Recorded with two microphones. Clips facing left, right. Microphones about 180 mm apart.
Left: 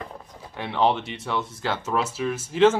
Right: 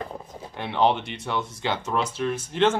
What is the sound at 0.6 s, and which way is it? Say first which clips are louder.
Speech: even; centre (ahead or behind).